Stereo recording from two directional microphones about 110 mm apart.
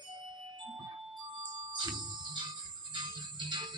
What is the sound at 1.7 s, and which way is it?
Music, 45° right (ahead or behind).